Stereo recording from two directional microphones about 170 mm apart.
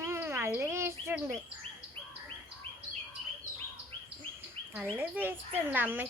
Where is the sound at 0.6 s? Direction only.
15° right (ahead or behind).